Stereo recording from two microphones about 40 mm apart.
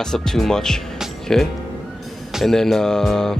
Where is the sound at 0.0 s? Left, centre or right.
Centre.